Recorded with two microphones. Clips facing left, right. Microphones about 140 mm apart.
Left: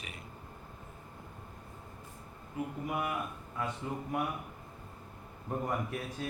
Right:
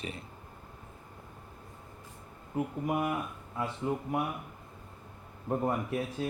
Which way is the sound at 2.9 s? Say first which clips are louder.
Right 5 dB; 40° right (ahead or behind).